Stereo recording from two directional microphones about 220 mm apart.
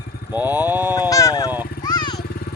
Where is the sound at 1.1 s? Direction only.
15° left (ahead or behind).